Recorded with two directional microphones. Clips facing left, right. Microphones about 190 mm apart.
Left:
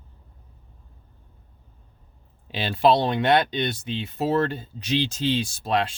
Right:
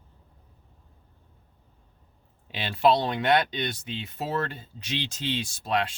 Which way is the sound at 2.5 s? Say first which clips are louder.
Left 3 dB; 30° left (ahead or behind).